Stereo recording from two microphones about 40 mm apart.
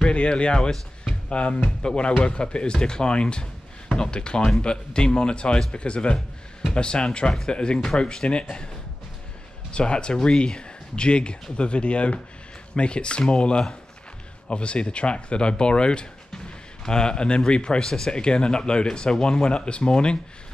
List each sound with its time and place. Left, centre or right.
0.0 s speech: left
9.7 s speech: left